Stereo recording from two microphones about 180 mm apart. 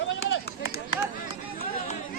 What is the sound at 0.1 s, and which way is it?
Run, 90° left.